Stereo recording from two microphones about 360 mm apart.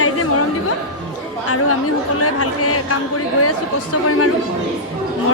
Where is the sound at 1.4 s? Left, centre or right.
Left.